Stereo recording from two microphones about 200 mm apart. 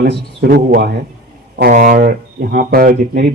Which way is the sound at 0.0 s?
55° right (ahead or behind).